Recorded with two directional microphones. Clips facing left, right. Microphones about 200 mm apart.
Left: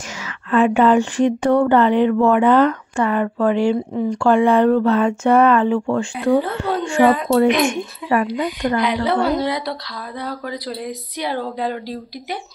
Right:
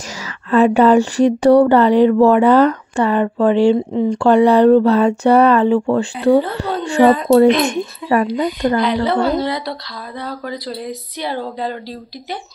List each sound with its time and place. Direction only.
0.2 s a woman's voice: 35° right (ahead or behind)
8.8 s speech: 10° left (ahead or behind)